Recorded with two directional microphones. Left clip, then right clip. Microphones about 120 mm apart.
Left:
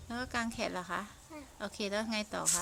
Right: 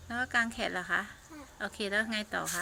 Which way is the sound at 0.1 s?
25° left (ahead or behind).